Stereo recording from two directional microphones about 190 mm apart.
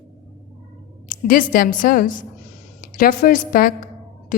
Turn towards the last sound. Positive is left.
turn(degrees=45)  # may be behind; listen again after turning